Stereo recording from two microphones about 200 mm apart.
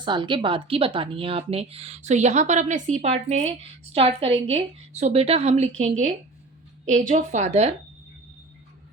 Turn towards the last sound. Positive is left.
turn(degrees=-35)  # may be behind; listen again after turning